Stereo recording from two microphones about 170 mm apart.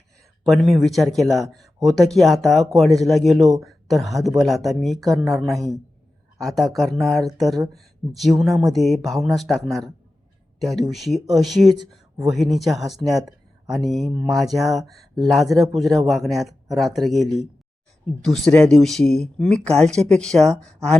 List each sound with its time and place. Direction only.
0.4 s speech: centre (ahead or behind)
5.5 s a man's voice: 20° right (ahead or behind)
6.4 s speech: centre (ahead or behind)